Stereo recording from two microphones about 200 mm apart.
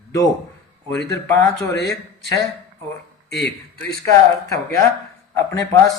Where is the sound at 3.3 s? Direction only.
55° left (ahead or behind).